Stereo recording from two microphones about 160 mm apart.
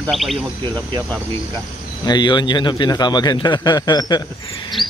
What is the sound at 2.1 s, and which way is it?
A man's voice, 30° left (ahead or behind).